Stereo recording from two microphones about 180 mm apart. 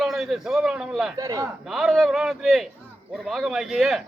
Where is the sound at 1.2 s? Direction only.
20° right (ahead or behind).